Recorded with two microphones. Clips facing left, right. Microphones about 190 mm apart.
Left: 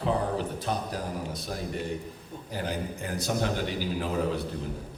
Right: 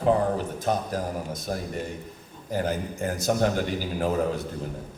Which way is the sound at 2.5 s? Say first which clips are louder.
Right 5 dB; 45° right (ahead or behind).